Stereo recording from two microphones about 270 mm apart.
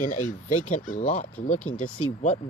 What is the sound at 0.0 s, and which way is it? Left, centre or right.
Speech, left.